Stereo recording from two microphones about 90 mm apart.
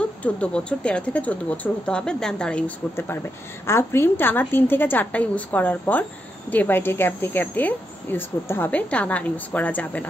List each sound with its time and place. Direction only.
0.2 s speech: 10° left (ahead or behind)
3.0 s a woman's voice: 25° left (ahead or behind)